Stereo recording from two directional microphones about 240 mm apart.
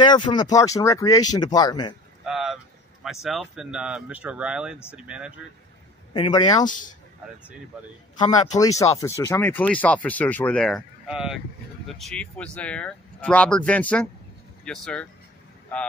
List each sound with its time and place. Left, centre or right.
0.0 s speech: centre
2.2 s speech: centre
6.1 s speech: centre
8.2 s speech: centre